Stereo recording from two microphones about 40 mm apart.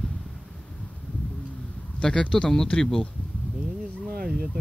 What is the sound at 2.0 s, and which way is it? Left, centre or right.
Speech, left.